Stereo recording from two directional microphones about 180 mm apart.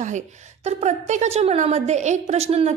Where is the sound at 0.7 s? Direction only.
40° right (ahead or behind).